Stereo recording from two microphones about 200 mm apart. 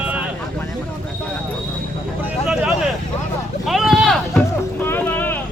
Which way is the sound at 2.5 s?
Centre (ahead or behind).